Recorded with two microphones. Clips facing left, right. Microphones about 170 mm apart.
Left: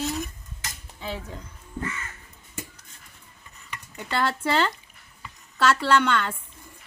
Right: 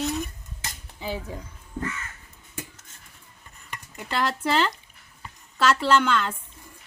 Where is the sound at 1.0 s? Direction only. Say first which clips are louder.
Right 2 dB; 10° right (ahead or behind).